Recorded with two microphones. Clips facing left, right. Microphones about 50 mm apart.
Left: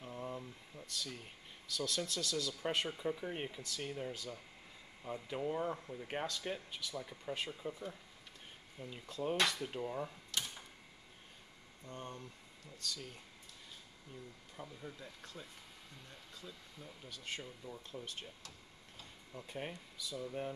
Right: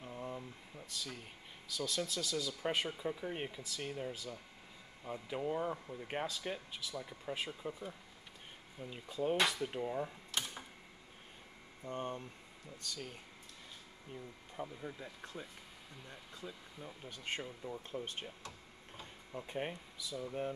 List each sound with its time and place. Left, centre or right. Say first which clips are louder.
0.0 s speech: even; centre
11.8 s speech: right 6 dB; right
17.1 s speech: right 3 dB; right
18.9 s tick-tock: right 5 dB; right
20.1 s speech: right 2 dB; centre